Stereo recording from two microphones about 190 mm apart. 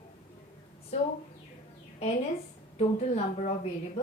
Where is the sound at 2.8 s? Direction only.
35° left (ahead or behind).